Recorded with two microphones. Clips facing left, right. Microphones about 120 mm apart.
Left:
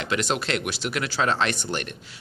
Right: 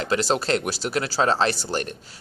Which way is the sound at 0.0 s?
35° right (ahead or behind).